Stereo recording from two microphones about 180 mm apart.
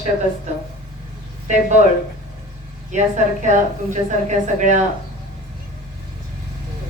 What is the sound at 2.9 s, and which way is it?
Speech, 40° right (ahead or behind).